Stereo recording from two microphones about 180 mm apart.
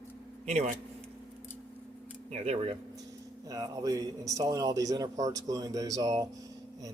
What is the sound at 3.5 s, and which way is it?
A man's voice, 20° right (ahead or behind).